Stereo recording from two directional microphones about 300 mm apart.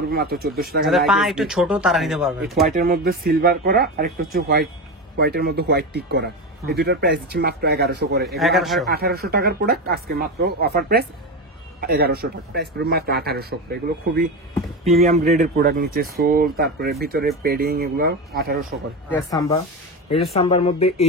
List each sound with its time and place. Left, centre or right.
0.1 s speech: right
0.8 s speech: centre
2.7 s speech: right
8.4 s speech: centre
8.9 s speech: right
19.0 s speech: centre